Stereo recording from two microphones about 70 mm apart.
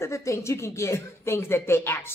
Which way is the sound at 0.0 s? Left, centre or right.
Left.